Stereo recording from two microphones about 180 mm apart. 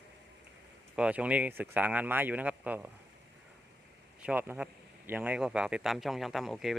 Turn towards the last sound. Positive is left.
turn(degrees=0)  # may be behind; listen again after turning